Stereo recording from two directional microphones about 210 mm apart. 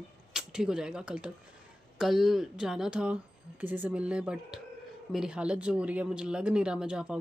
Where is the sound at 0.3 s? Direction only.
5° right (ahead or behind).